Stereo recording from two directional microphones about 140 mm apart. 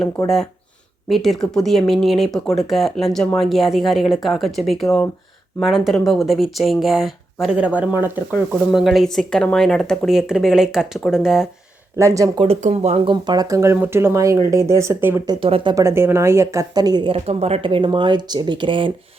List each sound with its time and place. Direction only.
0.2 s speech: 5° left (ahead or behind); by 8.4 s 15° right (ahead or behind)
8.7 s speech: centre (ahead or behind)
11.9 s a woman's voice: 20° right (ahead or behind)
12.6 s speech: 50° right (ahead or behind)
13.2 s a woman's voice: 30° right (ahead or behind)
15.3 s speech: 40° right (ahead or behind)
15.7 s a woman's voice: 20° right (ahead or behind)
17.1 s speech: 45° right (ahead or behind)